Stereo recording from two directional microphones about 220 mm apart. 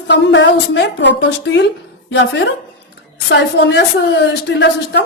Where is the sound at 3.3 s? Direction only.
55° left (ahead or behind).